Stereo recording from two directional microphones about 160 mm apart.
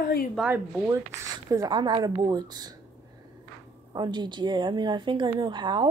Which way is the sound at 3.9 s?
25° right (ahead or behind).